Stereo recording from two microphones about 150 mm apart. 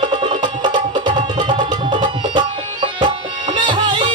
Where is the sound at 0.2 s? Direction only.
30° right (ahead or behind).